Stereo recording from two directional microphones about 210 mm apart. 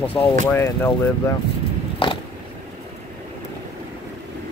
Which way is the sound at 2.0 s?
25° left (ahead or behind).